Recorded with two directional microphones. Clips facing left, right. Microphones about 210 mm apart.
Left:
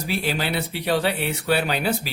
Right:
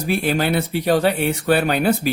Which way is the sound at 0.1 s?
50° right (ahead or behind).